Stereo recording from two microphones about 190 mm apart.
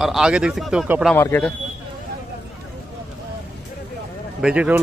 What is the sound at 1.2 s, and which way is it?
Speech, 10° left (ahead or behind).